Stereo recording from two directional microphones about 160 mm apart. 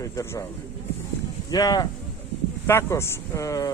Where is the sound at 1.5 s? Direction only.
25° left (ahead or behind).